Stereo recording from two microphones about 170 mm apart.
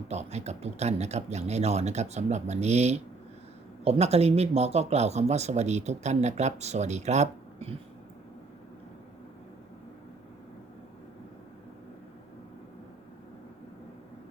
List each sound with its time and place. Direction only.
0.1 s speech: 40° right (ahead or behind)